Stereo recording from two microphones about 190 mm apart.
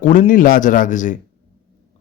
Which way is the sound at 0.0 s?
45° left (ahead or behind).